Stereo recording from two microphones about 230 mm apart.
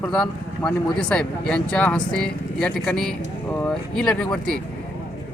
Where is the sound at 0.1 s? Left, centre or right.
Centre.